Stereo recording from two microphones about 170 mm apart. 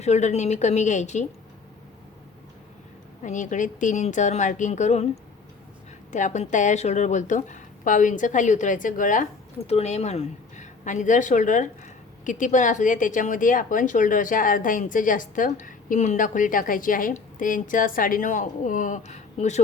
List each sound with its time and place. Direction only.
0.0 s a woman's voice: 40° left (ahead or behind)
3.2 s speech: 45° left (ahead or behind)
6.1 s speech: 45° left (ahead or behind)
9.6 s a woman's voice: 40° left (ahead or behind)